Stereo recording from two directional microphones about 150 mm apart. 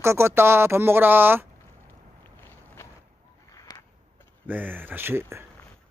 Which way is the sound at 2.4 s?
15° left (ahead or behind).